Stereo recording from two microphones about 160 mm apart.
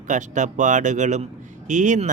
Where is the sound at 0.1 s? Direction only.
50° right (ahead or behind).